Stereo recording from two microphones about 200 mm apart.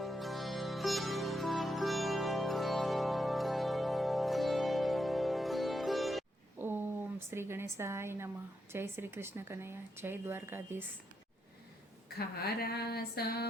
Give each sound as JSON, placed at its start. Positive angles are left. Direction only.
{"t": 0.0, "sound": "music", "side_deg": 0}
{"t": 7.3, "sound": "speech", "side_deg": -10}
{"t": 12.0, "sound": "speech", "side_deg": 50}